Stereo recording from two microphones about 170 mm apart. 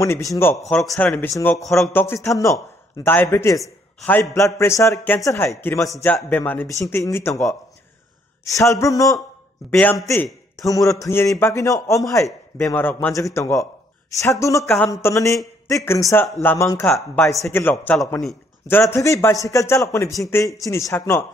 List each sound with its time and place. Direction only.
0.0 s a man's voice: 20° left (ahead or behind)
8.5 s a man's voice: 20° left (ahead or behind)
16.9 s speech: 5° left (ahead or behind)
17.3 s a man's voice: 15° left (ahead or behind)